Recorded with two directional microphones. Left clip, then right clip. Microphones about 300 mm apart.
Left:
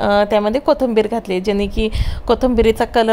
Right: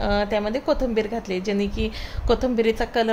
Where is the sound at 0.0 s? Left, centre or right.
Centre.